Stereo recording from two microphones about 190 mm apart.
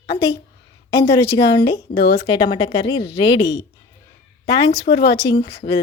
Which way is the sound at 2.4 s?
25° left (ahead or behind).